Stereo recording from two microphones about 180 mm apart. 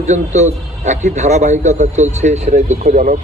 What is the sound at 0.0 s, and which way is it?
A man's voice, 40° right (ahead or behind).